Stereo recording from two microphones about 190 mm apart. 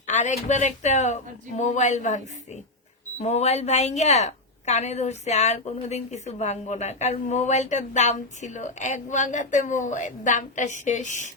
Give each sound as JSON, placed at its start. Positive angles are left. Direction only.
{"t": 0.1, "sound": "a woman's voice", "side_deg": 40}